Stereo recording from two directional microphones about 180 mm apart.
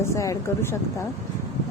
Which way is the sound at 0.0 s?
15° left (ahead or behind).